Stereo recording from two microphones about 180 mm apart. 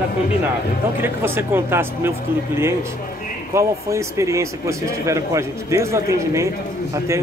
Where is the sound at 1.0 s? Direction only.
10° right (ahead or behind).